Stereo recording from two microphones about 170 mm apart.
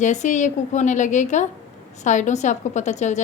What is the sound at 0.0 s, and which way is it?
A woman's voice, 45° left (ahead or behind).